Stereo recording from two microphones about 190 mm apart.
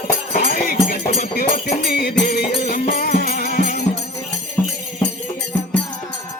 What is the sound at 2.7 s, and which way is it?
Music, 40° left (ahead or behind).